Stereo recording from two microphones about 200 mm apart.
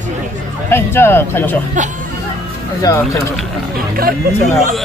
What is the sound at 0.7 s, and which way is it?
Speech, 10° left (ahead or behind).